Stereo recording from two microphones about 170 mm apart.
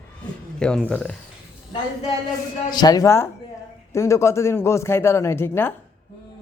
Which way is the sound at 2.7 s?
25° left (ahead or behind).